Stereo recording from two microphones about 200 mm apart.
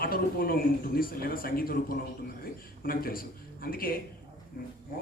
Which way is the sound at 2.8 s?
45° left (ahead or behind).